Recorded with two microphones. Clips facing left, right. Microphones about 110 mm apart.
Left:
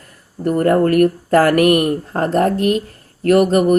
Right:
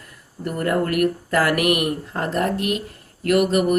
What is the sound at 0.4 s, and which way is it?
Speech, 40° left (ahead or behind).